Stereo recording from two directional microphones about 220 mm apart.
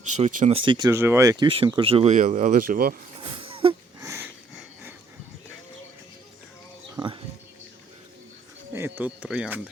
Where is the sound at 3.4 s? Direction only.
25° right (ahead or behind).